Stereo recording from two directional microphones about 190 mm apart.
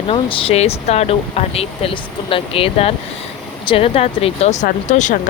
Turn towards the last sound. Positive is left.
turn(degrees=40)  # may be behind; listen again after turning